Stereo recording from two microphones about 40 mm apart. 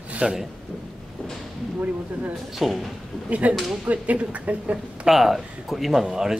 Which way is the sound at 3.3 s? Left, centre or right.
Right.